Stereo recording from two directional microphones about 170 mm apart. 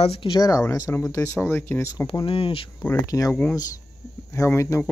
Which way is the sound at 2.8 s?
20° left (ahead or behind).